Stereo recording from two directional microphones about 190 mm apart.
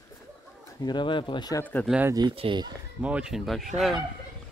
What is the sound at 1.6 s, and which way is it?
Speech, 10° left (ahead or behind).